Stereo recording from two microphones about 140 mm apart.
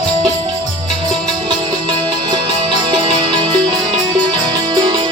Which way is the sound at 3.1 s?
30° right (ahead or behind).